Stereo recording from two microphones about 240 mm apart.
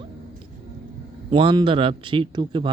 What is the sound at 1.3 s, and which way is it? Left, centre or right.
Speech, right.